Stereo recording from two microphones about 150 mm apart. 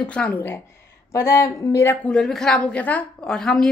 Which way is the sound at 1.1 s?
20° left (ahead or behind).